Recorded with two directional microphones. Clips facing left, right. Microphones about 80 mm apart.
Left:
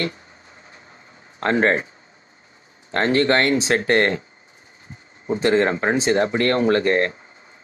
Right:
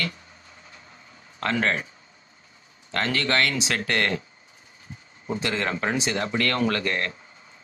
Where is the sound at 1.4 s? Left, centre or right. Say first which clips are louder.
Left 6 dB; left.